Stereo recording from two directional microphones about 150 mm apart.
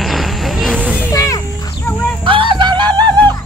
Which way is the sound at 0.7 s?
10° right (ahead or behind).